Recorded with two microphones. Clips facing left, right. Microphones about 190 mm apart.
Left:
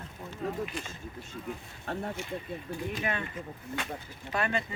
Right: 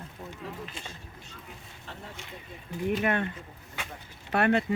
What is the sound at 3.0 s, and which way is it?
Speech, 60° right (ahead or behind).